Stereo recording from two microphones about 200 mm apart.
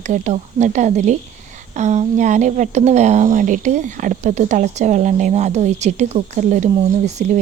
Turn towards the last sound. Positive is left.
turn(degrees=-35)  # may be behind; listen again after turning